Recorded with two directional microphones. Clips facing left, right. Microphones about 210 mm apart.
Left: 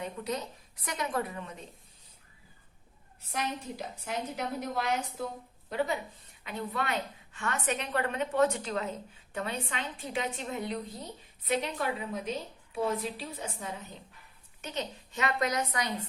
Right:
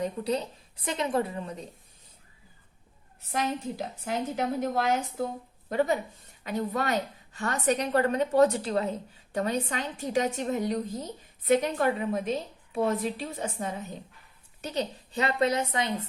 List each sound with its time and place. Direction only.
0.0 s a woman's voice: 30° right (ahead or behind)
3.3 s a woman's voice: 45° right (ahead or behind)
14.6 s a woman's voice: 35° right (ahead or behind)